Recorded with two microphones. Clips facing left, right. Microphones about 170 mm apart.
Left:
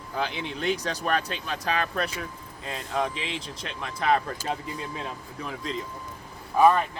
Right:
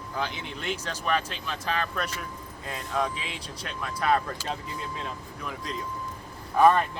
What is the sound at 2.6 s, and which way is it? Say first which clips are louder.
Speech: left 1 dB; 25° left (ahead or behind).